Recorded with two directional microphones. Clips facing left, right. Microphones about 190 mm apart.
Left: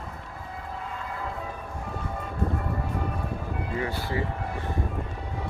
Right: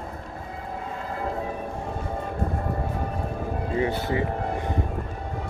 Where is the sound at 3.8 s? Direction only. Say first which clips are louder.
Right 5 dB; 20° right (ahead or behind).